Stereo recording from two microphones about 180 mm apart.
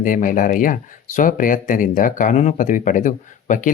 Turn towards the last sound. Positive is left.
turn(degrees=45)  # may be behind; listen again after turning